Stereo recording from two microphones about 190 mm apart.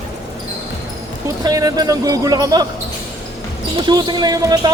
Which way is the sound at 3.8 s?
20° right (ahead or behind).